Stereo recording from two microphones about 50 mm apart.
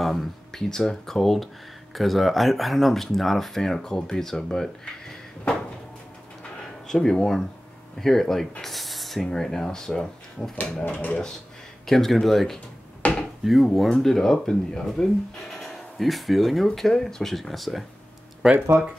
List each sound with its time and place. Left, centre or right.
0.0 s speech: centre
6.9 s speech: centre
10.9 s speech: left
11.8 s speech: centre
13.0 s dishes: left
13.4 s speech: centre
15.6 s speech: centre
18.4 s speech: centre